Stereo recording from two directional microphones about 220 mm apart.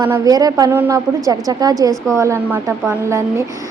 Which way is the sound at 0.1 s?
15° right (ahead or behind).